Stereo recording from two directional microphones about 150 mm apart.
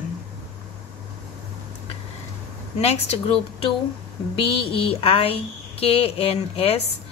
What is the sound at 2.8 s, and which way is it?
A woman's voice, 45° left (ahead or behind).